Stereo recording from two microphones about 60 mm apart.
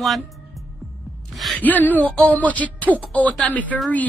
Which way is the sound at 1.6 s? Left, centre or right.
Left.